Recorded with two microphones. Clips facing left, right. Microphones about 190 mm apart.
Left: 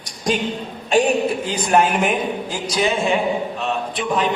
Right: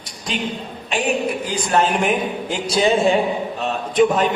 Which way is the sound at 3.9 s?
45° right (ahead or behind).